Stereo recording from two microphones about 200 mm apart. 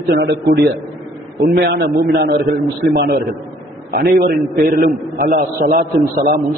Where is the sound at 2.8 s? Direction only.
50° right (ahead or behind).